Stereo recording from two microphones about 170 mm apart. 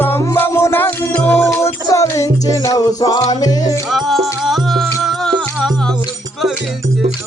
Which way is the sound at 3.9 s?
Centre (ahead or behind).